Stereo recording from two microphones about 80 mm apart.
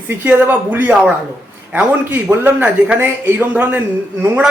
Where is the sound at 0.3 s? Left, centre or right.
Right.